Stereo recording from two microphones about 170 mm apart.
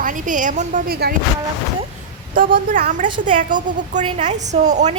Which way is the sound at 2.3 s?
55° right (ahead or behind).